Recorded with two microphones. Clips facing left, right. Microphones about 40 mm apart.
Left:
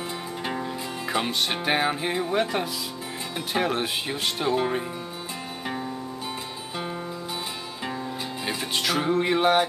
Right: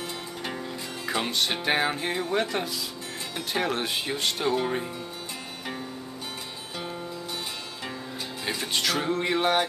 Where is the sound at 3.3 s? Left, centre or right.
Centre.